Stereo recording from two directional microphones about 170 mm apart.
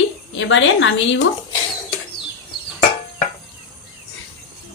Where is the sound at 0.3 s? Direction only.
90° left.